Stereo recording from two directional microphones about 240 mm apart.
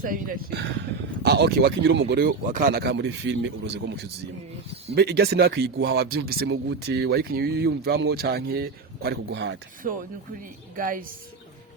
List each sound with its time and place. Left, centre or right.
0.0 s speech: right
10.8 s speech: right